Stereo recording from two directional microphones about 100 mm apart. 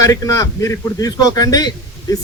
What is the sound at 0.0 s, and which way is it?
A man's voice, 35° left (ahead or behind).